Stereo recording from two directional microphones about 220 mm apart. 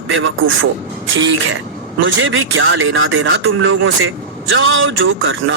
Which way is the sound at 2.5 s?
60° right (ahead or behind).